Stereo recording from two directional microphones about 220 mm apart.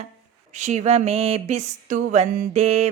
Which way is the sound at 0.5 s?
30° right (ahead or behind).